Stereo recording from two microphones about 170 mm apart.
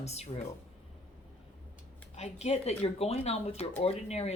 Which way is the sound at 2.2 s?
40° left (ahead or behind).